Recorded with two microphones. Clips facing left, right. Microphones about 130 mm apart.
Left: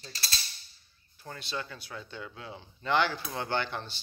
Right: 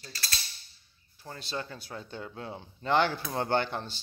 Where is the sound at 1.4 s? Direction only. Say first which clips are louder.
Right 1 dB; 40° right (ahead or behind).